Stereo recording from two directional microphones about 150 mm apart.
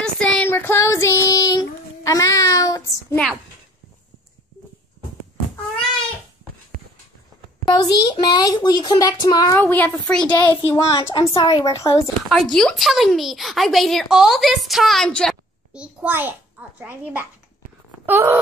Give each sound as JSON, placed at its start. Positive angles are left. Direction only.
{"t": 0.0, "sound": "child singing", "side_deg": 5}
{"t": 7.6, "sound": "a child's voice", "side_deg": 30}
{"t": 10.5, "sound": "speech", "side_deg": 35}
{"t": 12.3, "sound": "speech", "side_deg": 5}
{"t": 15.7, "sound": "a child's voice", "side_deg": -10}
{"t": 18.0, "sound": "wail", "side_deg": -15}